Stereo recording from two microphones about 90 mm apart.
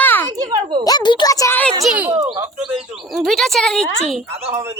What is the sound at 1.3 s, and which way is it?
Speech, 40° left (ahead or behind).